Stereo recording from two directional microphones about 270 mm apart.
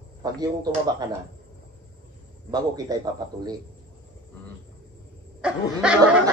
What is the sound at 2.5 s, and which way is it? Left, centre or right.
Speech, centre.